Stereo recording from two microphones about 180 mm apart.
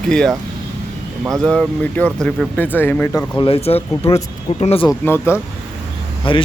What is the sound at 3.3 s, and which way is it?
Speech, 30° left (ahead or behind).